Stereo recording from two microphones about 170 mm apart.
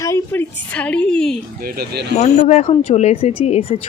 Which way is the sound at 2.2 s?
40° left (ahead or behind).